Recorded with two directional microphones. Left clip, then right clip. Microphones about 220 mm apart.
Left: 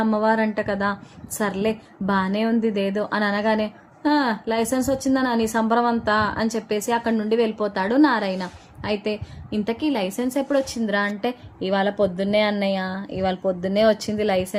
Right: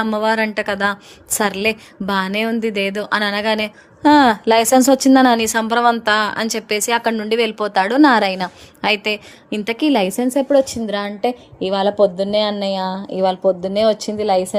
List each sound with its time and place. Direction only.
0.0 s a woman's voice: 40° right (ahead or behind); by 14.5 s 15° right (ahead or behind)